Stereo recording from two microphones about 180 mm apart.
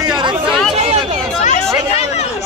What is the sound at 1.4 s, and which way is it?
Chatter, 40° left (ahead or behind).